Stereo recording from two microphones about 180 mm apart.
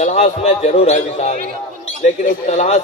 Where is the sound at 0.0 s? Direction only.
40° left (ahead or behind).